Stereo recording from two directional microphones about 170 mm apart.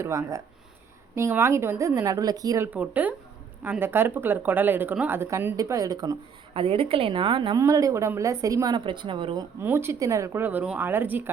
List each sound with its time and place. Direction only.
0.0 s speech: 20° right (ahead or behind)
2.6 s speech: 10° right (ahead or behind)
6.5 s a woman's voice: 30° right (ahead or behind)
7.6 s speech: 20° right (ahead or behind)
9.6 s speech: 15° right (ahead or behind)